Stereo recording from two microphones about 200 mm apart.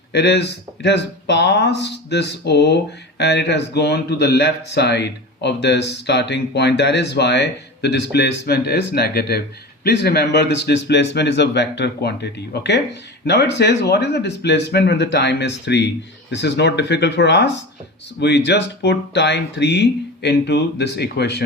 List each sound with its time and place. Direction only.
0.1 s speech: 60° left (ahead or behind)